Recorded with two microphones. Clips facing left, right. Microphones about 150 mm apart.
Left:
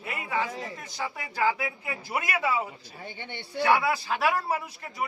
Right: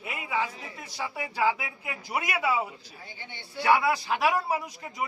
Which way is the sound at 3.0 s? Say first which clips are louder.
Left 7 dB; 65° left (ahead or behind).